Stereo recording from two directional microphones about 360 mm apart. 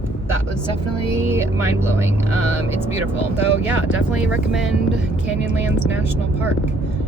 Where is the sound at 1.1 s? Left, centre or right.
Centre.